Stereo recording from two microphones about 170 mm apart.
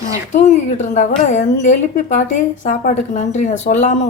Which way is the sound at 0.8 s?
45° left (ahead or behind).